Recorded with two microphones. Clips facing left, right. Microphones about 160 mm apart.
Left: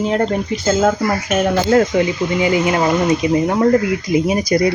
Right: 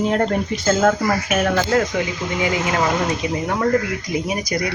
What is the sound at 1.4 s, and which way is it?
Speech, 30° left (ahead or behind).